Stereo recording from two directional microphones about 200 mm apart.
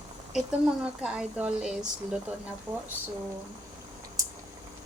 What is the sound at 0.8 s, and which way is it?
Speech, 5° right (ahead or behind).